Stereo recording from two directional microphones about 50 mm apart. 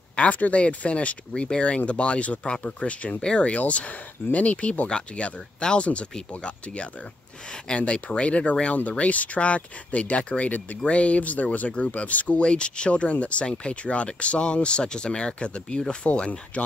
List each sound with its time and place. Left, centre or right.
0.1 s speech: left